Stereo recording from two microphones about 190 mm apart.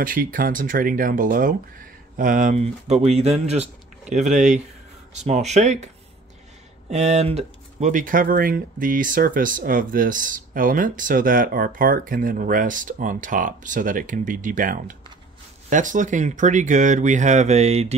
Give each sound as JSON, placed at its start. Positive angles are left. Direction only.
{"t": 0.0, "sound": "speech", "side_deg": -45}
{"t": 6.9, "sound": "speech", "side_deg": -35}